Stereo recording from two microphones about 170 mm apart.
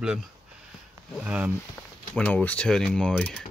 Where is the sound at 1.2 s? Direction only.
10° right (ahead or behind).